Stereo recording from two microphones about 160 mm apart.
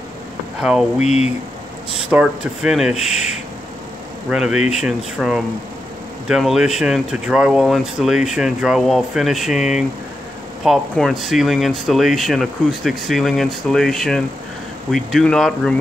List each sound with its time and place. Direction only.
0.6 s speech: 5° right (ahead or behind)
1.0 s speech: 45° left (ahead or behind)
2.0 s speech: 5° right (ahead or behind)